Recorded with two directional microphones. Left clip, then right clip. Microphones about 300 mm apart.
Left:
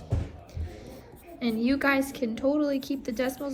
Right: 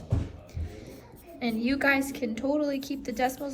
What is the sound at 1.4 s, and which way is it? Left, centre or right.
A woman's voice, centre.